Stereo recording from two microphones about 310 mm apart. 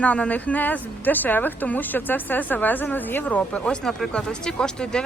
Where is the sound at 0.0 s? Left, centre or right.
Centre.